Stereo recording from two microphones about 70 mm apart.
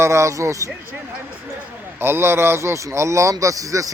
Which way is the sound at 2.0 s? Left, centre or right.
Right.